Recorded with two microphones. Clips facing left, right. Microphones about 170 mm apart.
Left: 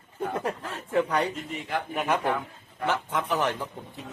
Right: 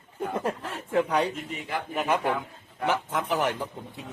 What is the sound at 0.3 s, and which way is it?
A man's voice, 10° right (ahead or behind).